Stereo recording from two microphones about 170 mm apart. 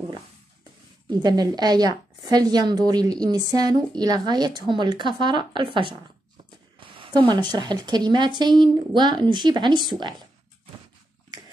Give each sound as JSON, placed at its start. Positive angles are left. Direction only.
{"t": 1.1, "sound": "a woman's voice", "side_deg": -25}